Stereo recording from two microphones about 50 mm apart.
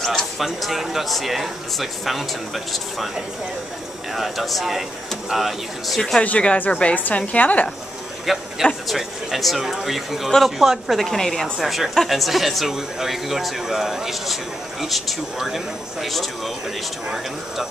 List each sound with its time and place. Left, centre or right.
0.0 s speech: centre
6.2 s a woman's voice: left
8.3 s speech: centre